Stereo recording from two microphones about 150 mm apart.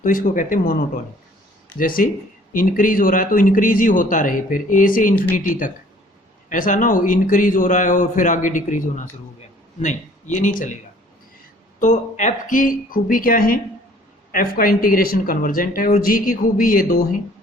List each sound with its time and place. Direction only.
0.0 s a man's voice: 65° left (ahead or behind)
1.8 s a man's voice: 70° left (ahead or behind)
11.8 s speech: 55° left (ahead or behind); by 17.0 s 75° left (ahead or behind)